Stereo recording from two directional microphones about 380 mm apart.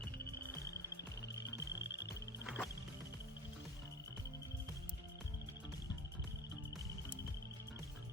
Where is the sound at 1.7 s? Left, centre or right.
Left.